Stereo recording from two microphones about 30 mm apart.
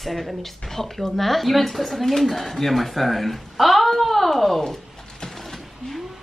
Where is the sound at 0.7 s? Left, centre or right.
Centre.